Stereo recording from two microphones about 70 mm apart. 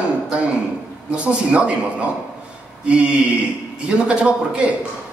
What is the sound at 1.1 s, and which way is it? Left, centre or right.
A man's voice, centre.